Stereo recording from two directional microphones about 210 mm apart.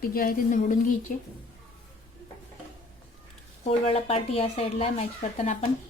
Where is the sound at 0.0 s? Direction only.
45° left (ahead or behind).